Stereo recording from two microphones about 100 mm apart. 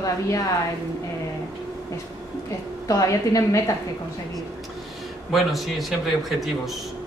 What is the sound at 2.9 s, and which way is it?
Speech, 35° left (ahead or behind).